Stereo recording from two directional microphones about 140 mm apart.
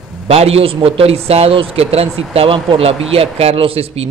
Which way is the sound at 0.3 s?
45° right (ahead or behind).